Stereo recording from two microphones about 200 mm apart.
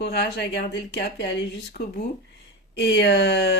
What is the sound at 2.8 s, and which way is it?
Speech, 55° left (ahead or behind).